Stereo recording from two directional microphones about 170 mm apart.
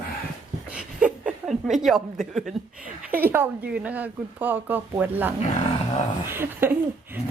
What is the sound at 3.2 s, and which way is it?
Speech, 10° right (ahead or behind).